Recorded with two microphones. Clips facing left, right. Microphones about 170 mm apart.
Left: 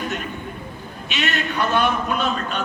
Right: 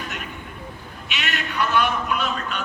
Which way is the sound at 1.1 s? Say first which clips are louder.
Left 4 dB; 25° left (ahead or behind).